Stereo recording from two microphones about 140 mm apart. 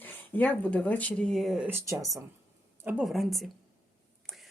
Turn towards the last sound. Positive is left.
turn(degrees=0)  # may be behind; listen again after turning